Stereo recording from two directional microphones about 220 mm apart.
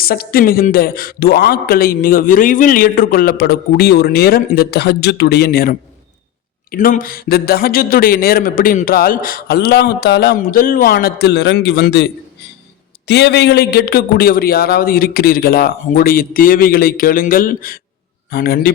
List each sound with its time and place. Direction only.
0.0 s a man's voice: 45° left (ahead or behind)